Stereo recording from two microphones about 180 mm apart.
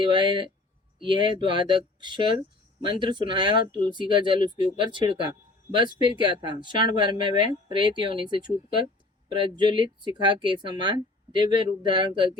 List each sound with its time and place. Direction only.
0.0 s speech: 25° right (ahead or behind)